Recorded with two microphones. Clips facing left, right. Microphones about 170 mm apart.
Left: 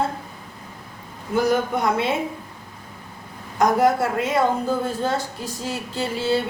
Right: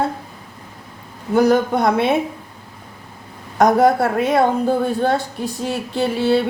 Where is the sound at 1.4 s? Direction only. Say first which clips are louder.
Right 6 dB; 70° right (ahead or behind).